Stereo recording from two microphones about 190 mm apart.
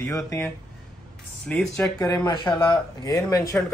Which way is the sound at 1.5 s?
5° left (ahead or behind).